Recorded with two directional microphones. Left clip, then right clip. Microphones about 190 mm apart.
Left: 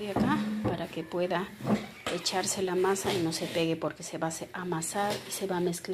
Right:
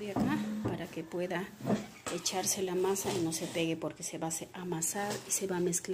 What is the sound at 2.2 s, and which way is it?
A woman's voice, 5° right (ahead or behind).